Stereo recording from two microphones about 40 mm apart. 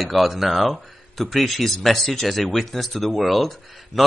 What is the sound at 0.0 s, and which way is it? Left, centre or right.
Speech, centre.